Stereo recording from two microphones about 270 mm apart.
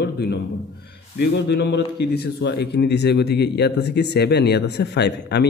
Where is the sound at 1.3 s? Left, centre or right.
Left.